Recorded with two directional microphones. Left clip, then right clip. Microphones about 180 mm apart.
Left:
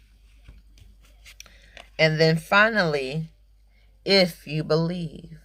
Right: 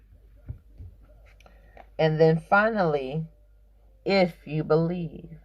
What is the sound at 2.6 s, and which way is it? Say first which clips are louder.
Speech: left 2 dB; 25° left (ahead or behind).